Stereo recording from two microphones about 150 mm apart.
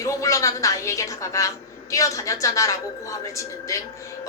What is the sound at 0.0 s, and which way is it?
A woman's voice, 20° left (ahead or behind).